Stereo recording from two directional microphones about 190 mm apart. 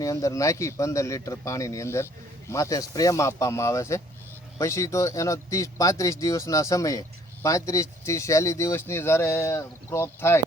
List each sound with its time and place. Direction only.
0.0 s speech: 15° left (ahead or behind)